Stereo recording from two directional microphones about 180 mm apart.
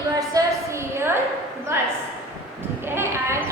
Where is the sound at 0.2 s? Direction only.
20° right (ahead or behind).